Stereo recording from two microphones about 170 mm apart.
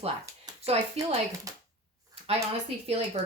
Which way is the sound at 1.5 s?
20° right (ahead or behind).